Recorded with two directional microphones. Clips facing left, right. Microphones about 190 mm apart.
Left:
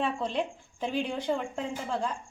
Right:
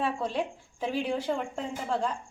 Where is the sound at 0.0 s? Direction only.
5° right (ahead or behind).